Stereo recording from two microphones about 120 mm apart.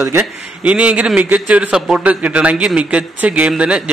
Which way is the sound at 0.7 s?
10° right (ahead or behind).